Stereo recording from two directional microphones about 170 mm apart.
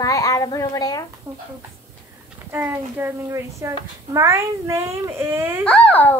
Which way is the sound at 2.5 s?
10° right (ahead or behind).